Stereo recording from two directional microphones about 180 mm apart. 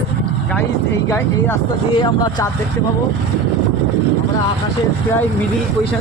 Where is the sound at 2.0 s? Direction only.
25° left (ahead or behind).